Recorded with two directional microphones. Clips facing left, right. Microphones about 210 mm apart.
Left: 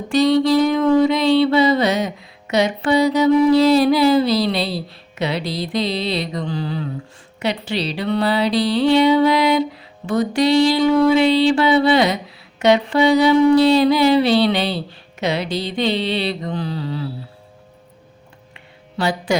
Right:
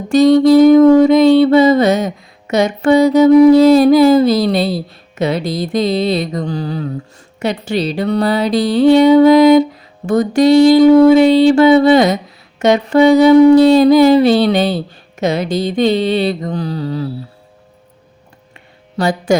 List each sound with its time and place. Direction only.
0.1 s music: 45° right (ahead or behind)
18.5 s music: 45° right (ahead or behind)